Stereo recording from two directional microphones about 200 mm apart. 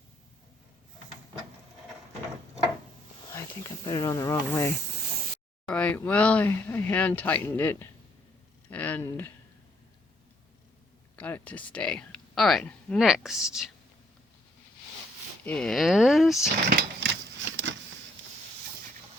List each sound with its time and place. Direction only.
3.8 s speech: 20° left (ahead or behind)
5.6 s speech: 5° left (ahead or behind)
11.2 s speech: 10° left (ahead or behind)
15.4 s speech: 5° left (ahead or behind)
16.6 s a sound: 65° right (ahead or behind)